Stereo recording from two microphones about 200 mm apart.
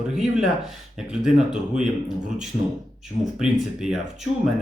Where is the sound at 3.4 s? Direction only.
Centre (ahead or behind).